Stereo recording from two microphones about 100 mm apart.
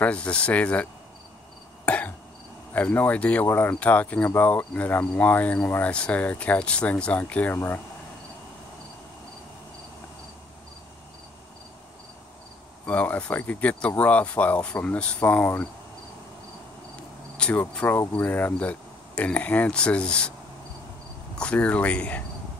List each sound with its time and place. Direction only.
0.0 s cricket: 10° left (ahead or behind)
1.9 s throat clearing: 15° left (ahead or behind)
2.7 s cricket: 15° left (ahead or behind)
7.5 s speech: 20° left (ahead or behind)
12.8 s cricket: 15° left (ahead or behind)
17.4 s cricket: 15° left (ahead or behind)
21.4 s cricket: 10° left (ahead or behind)